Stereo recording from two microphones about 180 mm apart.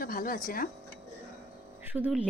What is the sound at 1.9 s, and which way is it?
Speech, 5° right (ahead or behind).